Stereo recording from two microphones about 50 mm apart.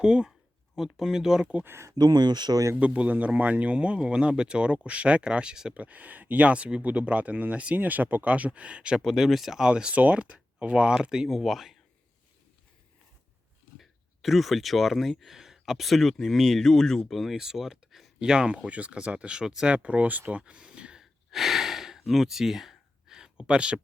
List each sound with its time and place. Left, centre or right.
0.0 s speech: centre
0.8 s speech: centre
1.6 s speech: right
2.7 s speech: right
5.7 s speech: right
9.0 s speech: centre
9.9 s speech: right
10.3 s speech: centre
11.3 s speech: centre
13.7 s speech: centre
18.2 s speech: centre
19.7 s speech: right
21.0 s gasp: centre